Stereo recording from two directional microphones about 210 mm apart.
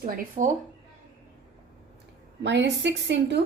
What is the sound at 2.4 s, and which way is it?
Speech, 55° right (ahead or behind).